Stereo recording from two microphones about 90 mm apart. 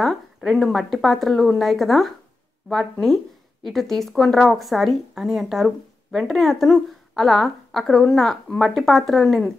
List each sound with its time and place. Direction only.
0.0 s speech: centre (ahead or behind)